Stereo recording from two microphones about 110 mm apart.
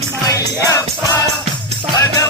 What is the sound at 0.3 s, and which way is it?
Music, 30° left (ahead or behind).